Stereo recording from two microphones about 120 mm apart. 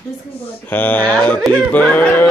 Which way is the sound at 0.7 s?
15° left (ahead or behind).